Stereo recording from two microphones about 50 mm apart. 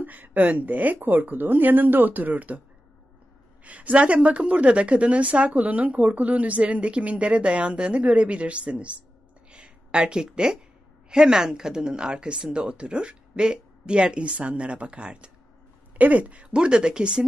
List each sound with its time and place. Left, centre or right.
0.0 s speech: right
3.6 s a woman's voice: right
9.5 s a sound: right
11.1 s a woman's voice: centre